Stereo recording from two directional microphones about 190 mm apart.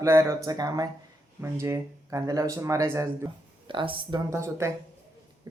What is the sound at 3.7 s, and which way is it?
Speech, 25° right (ahead or behind).